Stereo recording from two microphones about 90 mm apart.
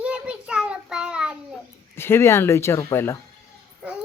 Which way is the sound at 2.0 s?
25° left (ahead or behind).